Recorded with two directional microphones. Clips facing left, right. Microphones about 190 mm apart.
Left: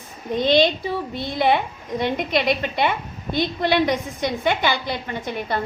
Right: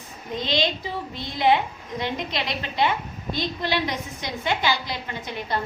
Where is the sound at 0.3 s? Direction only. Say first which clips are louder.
Left 8 dB; 55° left (ahead or behind).